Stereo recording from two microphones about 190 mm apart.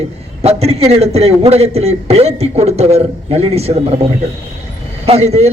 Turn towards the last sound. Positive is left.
turn(degrees=-35)  # may be behind; listen again after turning